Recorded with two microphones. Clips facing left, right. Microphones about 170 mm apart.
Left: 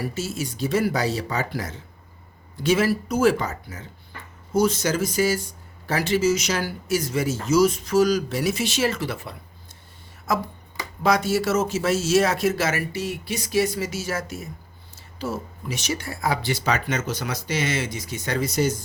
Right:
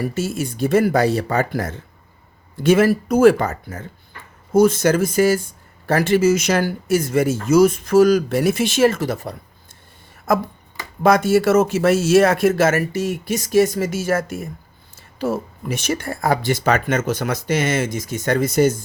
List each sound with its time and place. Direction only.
0.0 s speech: 55° right (ahead or behind)
10.3 s speech: 55° right (ahead or behind)